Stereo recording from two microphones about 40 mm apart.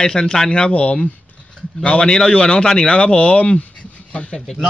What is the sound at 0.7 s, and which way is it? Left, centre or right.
A man's voice, left.